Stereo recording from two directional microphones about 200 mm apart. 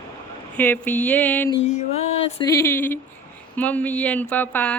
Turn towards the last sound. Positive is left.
turn(degrees=10)  # may be behind; listen again after turning